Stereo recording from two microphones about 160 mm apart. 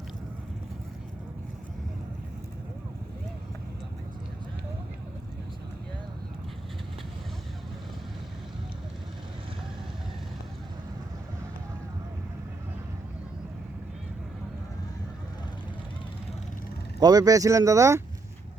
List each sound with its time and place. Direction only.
17.0 s speech: 25° right (ahead or behind)